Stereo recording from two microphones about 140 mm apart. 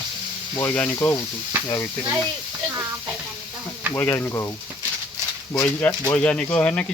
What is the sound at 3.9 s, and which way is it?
Speech, 15° left (ahead or behind).